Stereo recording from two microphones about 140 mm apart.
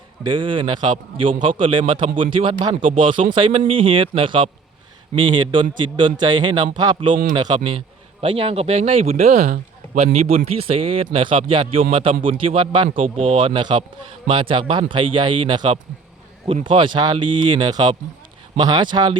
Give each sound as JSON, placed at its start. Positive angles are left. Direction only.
{"t": 0.2, "sound": "speech", "side_deg": -35}
{"t": 8.2, "sound": "a man's voice", "side_deg": -40}
{"t": 10.0, "sound": "speech", "side_deg": -50}